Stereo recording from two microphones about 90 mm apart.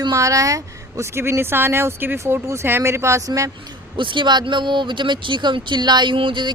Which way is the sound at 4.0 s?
65° right (ahead or behind).